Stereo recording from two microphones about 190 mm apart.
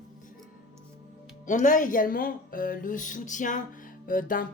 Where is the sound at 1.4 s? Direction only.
40° left (ahead or behind).